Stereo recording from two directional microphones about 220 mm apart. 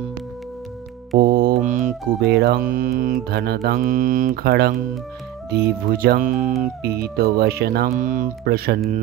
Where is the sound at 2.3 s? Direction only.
45° right (ahead or behind).